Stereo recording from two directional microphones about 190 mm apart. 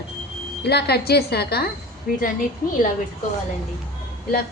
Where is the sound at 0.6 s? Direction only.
60° left (ahead or behind).